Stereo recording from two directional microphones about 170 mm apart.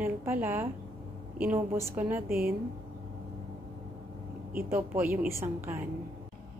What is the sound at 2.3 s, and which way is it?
Speech, 60° right (ahead or behind).